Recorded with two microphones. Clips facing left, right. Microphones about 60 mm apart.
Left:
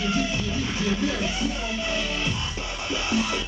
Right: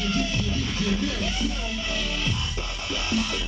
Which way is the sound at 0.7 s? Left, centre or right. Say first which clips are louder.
Left 2 dB; centre.